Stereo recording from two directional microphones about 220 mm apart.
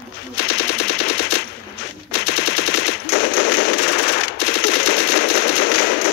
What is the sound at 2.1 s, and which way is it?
Machine gun, 50° left (ahead or behind).